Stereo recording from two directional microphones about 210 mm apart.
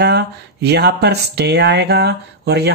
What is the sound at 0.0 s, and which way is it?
Speech, 55° right (ahead or behind).